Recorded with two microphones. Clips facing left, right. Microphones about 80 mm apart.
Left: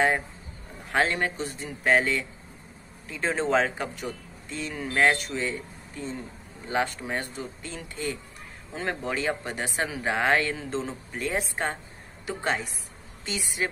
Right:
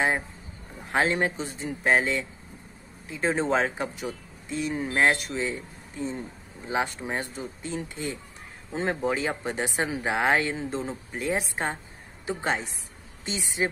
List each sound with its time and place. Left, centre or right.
0.9 s speech: right